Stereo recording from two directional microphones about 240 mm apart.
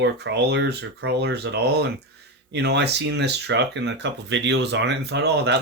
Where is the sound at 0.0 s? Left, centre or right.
Right.